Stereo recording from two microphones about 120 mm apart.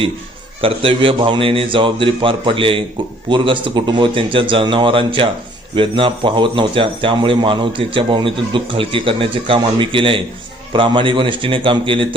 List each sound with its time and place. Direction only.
0.6 s speech: 50° right (ahead or behind)